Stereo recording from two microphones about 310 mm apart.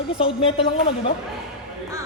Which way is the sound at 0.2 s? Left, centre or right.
Centre.